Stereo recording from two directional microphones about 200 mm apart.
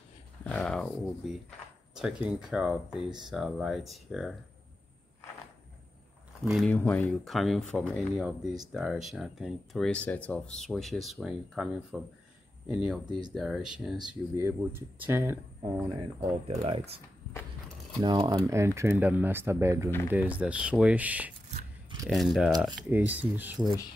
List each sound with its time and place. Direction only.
0.4 s a sound: 5° left (ahead or behind)
2.0 s speech: 5° right (ahead or behind)
6.4 s speech: centre (ahead or behind)
16.2 s speech: 30° right (ahead or behind)
18.0 s speech: 20° right (ahead or behind)